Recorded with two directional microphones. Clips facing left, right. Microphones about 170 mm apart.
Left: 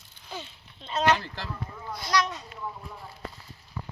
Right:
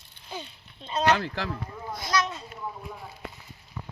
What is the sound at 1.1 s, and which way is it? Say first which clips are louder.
Speech: right 6 dB; 60° right (ahead or behind).